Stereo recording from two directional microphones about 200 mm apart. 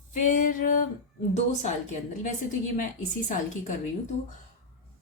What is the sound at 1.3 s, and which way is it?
A woman's voice, 35° left (ahead or behind).